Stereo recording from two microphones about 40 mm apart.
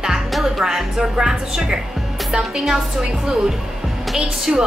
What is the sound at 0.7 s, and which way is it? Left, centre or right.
A woman's voice, centre.